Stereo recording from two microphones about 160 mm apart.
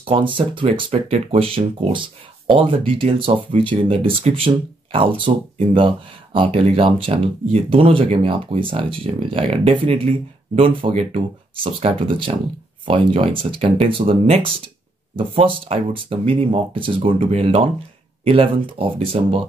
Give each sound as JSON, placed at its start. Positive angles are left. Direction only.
{"t": 0.0, "sound": "speech", "side_deg": -35}